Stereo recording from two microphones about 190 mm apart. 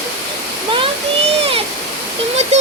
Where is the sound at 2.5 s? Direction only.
35° right (ahead or behind).